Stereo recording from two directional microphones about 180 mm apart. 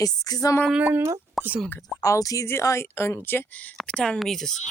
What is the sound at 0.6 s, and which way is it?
Speech, 5° right (ahead or behind).